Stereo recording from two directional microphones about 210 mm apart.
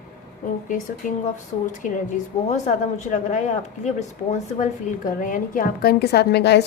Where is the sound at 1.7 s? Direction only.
35° left (ahead or behind).